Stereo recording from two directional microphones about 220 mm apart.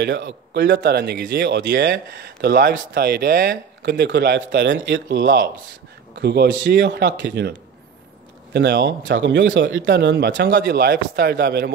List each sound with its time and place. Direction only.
0.0 s speech: 50° right (ahead or behind)
8.5 s speech: 50° right (ahead or behind)